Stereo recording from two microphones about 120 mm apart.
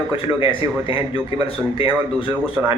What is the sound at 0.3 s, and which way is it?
Speech, 45° left (ahead or behind).